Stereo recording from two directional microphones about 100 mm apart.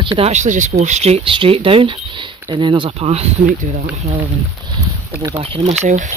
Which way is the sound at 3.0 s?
90° right.